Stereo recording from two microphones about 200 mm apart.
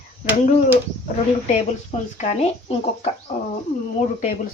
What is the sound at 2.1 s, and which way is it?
Speech, 35° left (ahead or behind).